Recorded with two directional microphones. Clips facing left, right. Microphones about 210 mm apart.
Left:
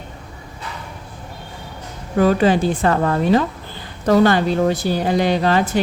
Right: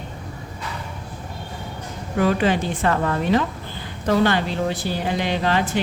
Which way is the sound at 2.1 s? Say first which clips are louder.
Left 4 dB; 40° left (ahead or behind).